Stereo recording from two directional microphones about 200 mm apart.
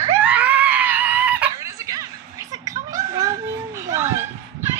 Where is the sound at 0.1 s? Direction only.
5° right (ahead or behind).